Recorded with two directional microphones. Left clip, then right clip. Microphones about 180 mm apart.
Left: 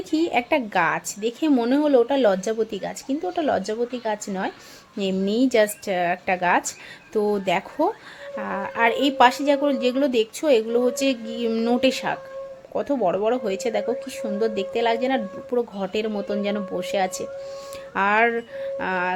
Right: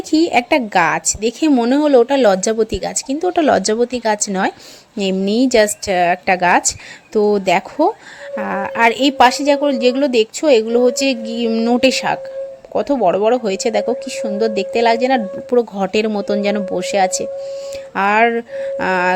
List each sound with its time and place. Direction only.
0.1 s a woman's voice: 30° right (ahead or behind)